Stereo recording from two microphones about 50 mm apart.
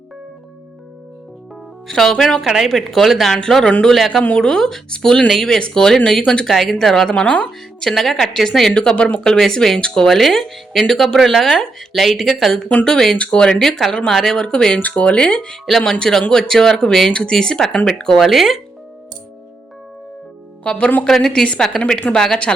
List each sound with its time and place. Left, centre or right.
1.9 s speech: centre
4.2 s speech: centre
7.1 s speech: centre
8.7 s speech: centre
13.1 s speech: left
13.6 s speech: centre
14.4 s speech: centre
14.8 s speech: left
15.0 s speech: left
15.6 s speech: centre
18.2 s speech: centre
20.7 s speech: left
21.0 s speech: centre